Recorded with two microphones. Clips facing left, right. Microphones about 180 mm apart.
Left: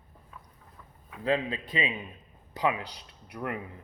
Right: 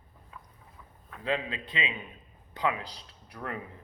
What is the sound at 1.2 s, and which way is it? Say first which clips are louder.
A man's voice: left 4 dB; 35° left (ahead or behind).